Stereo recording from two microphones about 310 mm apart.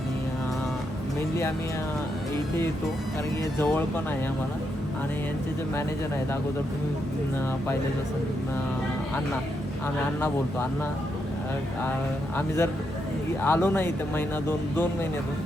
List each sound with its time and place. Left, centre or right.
3.6 s speech: centre
10.2 s speech: centre
12.4 s speech: centre